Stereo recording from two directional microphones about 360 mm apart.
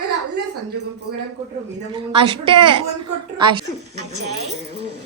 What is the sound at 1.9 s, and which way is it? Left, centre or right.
A woman's voice, centre.